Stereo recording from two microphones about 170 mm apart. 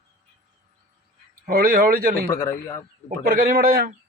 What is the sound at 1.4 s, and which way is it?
Speech, 60° right (ahead or behind).